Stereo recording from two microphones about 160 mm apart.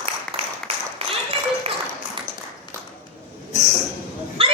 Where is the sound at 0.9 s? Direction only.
40° right (ahead or behind).